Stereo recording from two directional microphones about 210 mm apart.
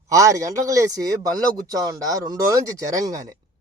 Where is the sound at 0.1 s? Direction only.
15° right (ahead or behind).